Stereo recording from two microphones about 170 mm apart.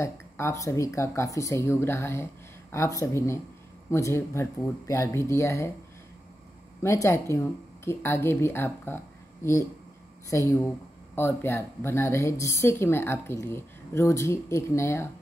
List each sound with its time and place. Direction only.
0.0 s speech: 15° left (ahead or behind)
6.8 s speech: 15° left (ahead or behind)